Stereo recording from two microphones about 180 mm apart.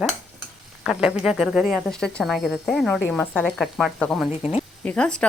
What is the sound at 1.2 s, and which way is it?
Speech, 5° right (ahead or behind).